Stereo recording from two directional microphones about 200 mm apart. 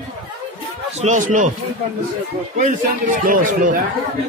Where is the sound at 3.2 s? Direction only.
40° right (ahead or behind).